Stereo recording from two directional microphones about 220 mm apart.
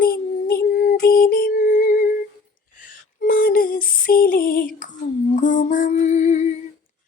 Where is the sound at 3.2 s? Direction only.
45° left (ahead or behind).